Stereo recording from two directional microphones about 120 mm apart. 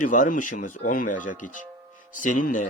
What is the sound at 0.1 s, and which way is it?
Speech, 90° left.